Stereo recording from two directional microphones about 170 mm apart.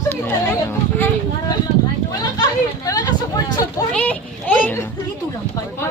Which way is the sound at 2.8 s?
20° left (ahead or behind).